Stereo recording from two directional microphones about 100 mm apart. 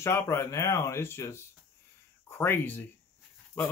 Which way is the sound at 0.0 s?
25° left (ahead or behind).